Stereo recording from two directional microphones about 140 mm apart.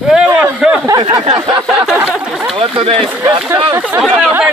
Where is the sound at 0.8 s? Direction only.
30° right (ahead or behind).